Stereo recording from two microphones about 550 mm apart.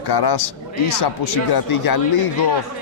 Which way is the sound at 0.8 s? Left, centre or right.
Left.